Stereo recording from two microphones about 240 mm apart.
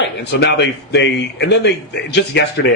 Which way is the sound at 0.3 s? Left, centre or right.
Left.